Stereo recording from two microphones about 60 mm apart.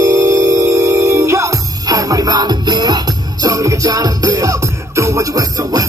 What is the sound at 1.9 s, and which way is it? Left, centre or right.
Music, right.